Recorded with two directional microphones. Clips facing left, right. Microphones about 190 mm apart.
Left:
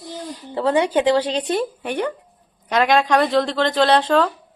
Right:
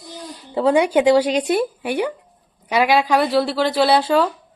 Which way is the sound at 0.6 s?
10° right (ahead or behind).